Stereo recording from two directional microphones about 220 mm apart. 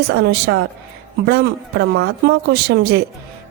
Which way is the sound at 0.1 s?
45° right (ahead or behind).